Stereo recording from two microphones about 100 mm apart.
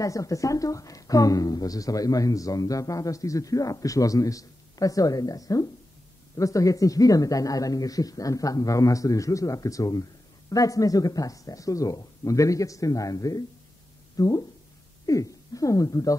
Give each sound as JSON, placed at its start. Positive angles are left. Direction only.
{"t": 0.0, "sound": "speech", "side_deg": 35}